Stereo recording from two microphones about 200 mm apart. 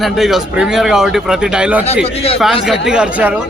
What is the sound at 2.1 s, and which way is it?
Speech, 30° left (ahead or behind).